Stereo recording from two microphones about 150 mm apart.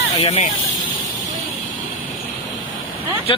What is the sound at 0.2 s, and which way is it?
Speech, 45° left (ahead or behind).